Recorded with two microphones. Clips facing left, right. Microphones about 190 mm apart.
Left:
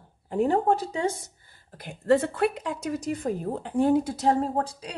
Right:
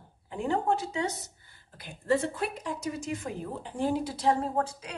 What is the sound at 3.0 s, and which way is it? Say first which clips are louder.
Speech: left 6 dB; 35° left (ahead or behind).